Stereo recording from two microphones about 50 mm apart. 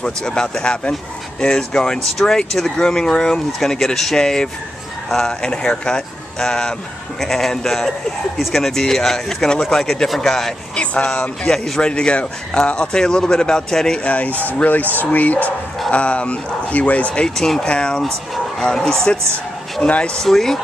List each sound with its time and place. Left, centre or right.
0.0 s speech: centre
11.8 s speech: left
14.0 s speech: left
17.4 s speech: centre
20.2 s speech: centre